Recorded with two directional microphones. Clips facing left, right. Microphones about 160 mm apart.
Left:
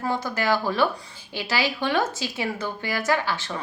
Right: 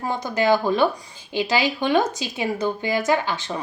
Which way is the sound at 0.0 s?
20° right (ahead or behind).